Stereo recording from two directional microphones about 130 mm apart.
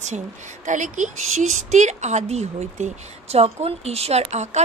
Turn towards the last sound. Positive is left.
turn(degrees=-60)  # may be behind; listen again after turning